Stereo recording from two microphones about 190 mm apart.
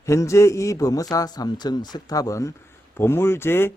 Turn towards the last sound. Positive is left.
turn(degrees=10)  # may be behind; listen again after turning